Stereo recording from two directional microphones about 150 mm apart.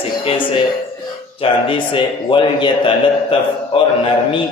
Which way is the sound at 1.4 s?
35° left (ahead or behind).